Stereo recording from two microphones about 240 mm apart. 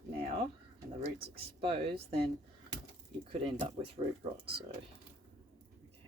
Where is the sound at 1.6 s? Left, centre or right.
Right.